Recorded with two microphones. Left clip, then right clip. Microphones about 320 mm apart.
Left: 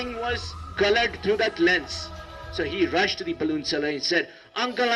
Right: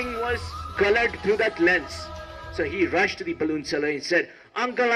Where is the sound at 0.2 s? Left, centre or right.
Centre.